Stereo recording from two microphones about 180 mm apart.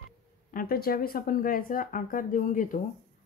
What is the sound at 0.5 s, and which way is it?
Speech, 55° left (ahead or behind).